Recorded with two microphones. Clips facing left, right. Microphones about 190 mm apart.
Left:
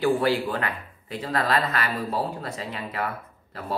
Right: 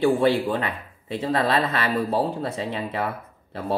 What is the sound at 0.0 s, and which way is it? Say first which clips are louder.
Speech: right 3 dB; 25° right (ahead or behind).